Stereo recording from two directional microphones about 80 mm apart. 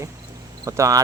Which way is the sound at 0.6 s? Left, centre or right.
Right.